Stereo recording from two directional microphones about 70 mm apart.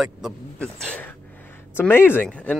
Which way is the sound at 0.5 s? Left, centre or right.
Centre.